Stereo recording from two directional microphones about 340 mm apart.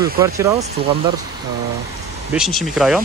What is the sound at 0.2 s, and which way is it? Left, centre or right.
Speech, centre.